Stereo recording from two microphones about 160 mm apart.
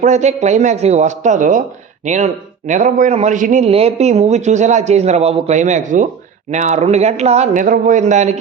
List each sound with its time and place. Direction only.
0.0 s a man's voice: 45° right (ahead or behind)